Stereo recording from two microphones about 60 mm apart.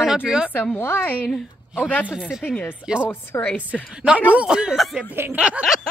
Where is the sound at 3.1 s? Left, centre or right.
Left.